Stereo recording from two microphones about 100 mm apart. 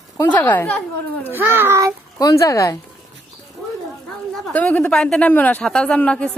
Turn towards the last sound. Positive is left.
turn(degrees=10)  # may be behind; listen again after turning